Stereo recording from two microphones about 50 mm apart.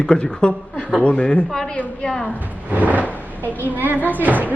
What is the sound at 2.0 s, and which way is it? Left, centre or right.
Music, centre.